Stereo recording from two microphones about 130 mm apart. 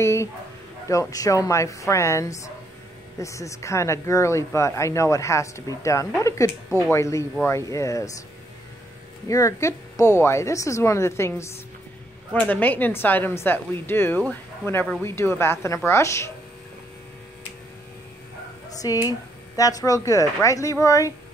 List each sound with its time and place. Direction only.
0.0 s speech: 20° left (ahead or behind)
9.3 s a woman's voice: 25° left (ahead or behind)
18.8 s speech: 25° left (ahead or behind)